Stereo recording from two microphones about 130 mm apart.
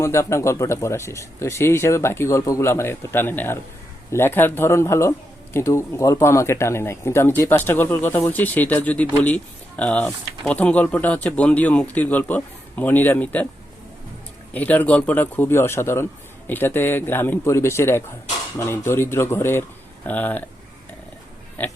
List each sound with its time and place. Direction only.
0.0 s speech: 20° left (ahead or behind)
14.5 s speech: 15° left (ahead or behind)